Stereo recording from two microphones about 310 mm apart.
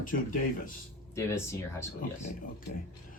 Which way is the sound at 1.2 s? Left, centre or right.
Centre.